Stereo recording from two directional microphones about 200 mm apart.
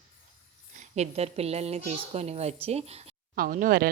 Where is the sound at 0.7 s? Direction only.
35° right (ahead or behind).